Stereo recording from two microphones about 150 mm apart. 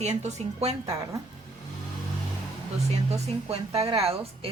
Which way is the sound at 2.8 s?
45° right (ahead or behind).